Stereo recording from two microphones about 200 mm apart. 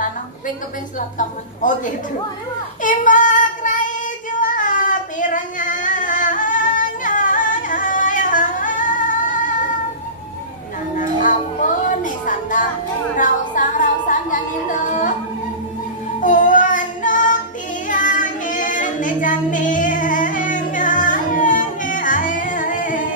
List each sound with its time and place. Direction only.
1.1 s a woman's voice: 40° left (ahead or behind)
2.8 s child singing: 40° left (ahead or behind)
4.4 s a sound: 40° left (ahead or behind)
11.0 s music: 40° left (ahead or behind)
16.2 s child singing: 40° left (ahead or behind)
17.8 s singing: 40° left (ahead or behind)